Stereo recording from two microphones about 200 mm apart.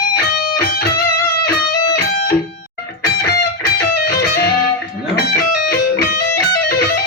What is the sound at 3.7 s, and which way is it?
Music, 55° left (ahead or behind).